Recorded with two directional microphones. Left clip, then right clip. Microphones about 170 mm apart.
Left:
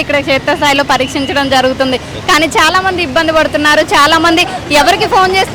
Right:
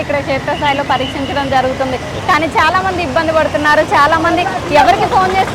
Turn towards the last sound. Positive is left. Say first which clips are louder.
# left 2 dB
turn(degrees=45)  # may be behind; listen again after turning